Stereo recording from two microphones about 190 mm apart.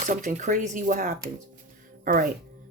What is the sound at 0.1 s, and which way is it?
Speech, 45° right (ahead or behind).